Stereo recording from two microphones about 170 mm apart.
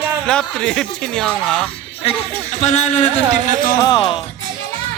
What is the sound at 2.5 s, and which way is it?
Speech, 45° left (ahead or behind).